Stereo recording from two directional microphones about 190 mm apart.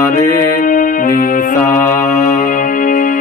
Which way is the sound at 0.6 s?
45° left (ahead or behind).